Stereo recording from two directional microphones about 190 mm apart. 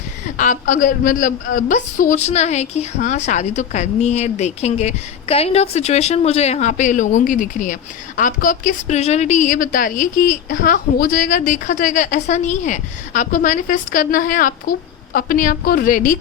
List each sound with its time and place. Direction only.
0.3 s a woman's voice: 45° left (ahead or behind)